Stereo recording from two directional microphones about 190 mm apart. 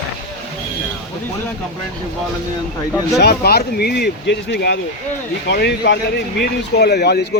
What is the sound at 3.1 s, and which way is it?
Speech, 55° left (ahead or behind).